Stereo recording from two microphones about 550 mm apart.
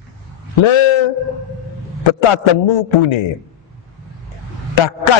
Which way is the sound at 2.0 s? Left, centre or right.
Left.